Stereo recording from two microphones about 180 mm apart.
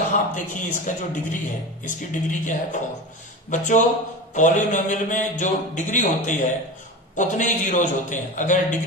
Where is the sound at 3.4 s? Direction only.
45° left (ahead or behind).